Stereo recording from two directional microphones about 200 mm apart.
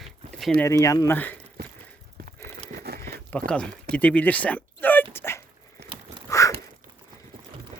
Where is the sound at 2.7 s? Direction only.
50° right (ahead or behind).